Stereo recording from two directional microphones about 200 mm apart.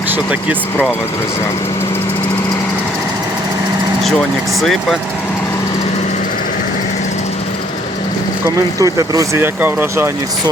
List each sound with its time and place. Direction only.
4.6 s speech: centre (ahead or behind)
8.4 s speech: 15° right (ahead or behind)